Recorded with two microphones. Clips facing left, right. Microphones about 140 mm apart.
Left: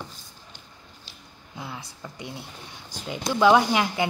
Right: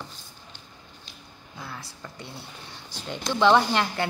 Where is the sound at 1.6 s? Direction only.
15° left (ahead or behind).